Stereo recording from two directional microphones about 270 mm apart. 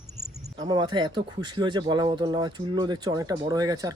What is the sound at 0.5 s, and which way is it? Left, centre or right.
Speech, centre.